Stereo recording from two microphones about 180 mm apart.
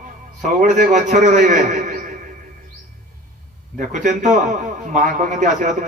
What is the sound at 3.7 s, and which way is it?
A man's voice, 45° right (ahead or behind).